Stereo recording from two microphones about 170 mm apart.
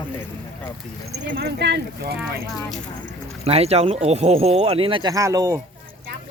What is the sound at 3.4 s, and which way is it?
Speech, 35° right (ahead or behind).